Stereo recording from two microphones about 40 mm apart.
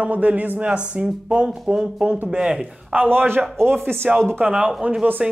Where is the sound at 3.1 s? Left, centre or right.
Right.